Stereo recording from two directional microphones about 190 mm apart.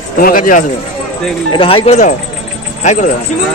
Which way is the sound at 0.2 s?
45° left (ahead or behind).